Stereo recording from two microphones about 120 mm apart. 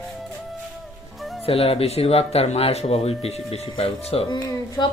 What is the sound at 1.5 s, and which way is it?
Speech, 55° left (ahead or behind).